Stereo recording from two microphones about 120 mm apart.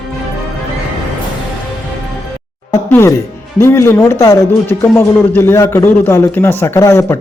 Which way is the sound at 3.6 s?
20° left (ahead or behind).